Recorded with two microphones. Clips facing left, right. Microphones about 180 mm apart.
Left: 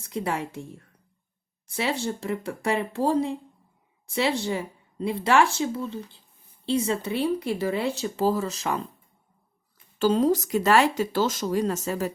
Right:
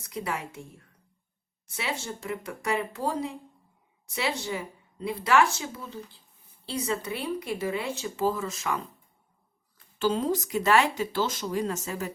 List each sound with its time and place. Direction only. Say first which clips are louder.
0.1 s speech: left 5 dB; 30° left (ahead or behind)
1.7 s speech: left 6 dB; 30° left (ahead or behind)
10.0 s speech: left 5 dB; 40° left (ahead or behind)